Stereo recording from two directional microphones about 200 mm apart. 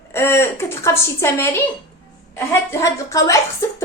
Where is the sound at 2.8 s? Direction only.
15° left (ahead or behind).